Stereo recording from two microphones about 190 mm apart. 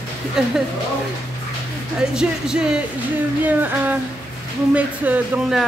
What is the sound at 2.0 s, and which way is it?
Speech, 5° right (ahead or behind).